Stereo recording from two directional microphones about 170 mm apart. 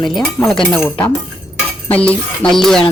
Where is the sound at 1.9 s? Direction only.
10° left (ahead or behind).